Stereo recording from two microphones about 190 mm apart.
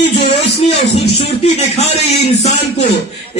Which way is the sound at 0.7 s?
35° left (ahead or behind).